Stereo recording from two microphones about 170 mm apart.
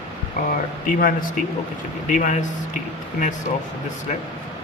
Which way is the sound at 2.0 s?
50° left (ahead or behind).